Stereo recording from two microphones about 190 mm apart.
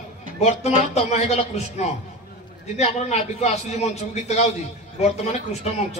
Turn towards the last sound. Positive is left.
turn(degrees=35)  # may be behind; listen again after turning